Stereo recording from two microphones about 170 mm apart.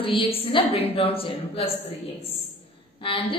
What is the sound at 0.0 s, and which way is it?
A woman's voice, 30° left (ahead or behind).